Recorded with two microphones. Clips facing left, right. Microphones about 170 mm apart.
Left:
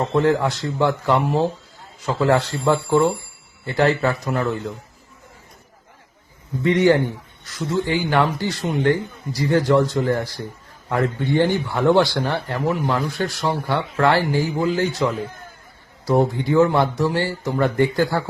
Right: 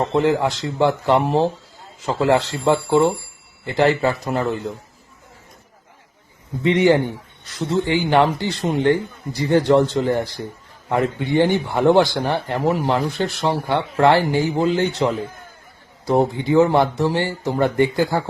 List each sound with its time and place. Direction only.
0.1 s a man's voice: 20° right (ahead or behind)
6.6 s a man's voice: 15° right (ahead or behind)